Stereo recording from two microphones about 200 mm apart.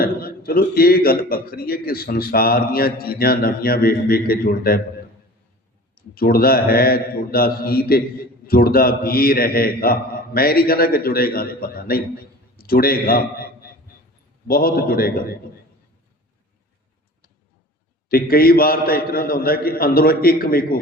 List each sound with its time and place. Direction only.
0.0 s speech: 50° left (ahead or behind)
5.9 s speech: 50° left (ahead or behind)
18.1 s speech: 50° left (ahead or behind)